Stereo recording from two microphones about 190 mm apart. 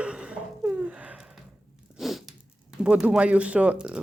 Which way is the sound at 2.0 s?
Centre (ahead or behind).